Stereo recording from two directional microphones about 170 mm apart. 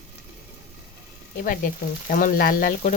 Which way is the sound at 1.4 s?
55° left (ahead or behind).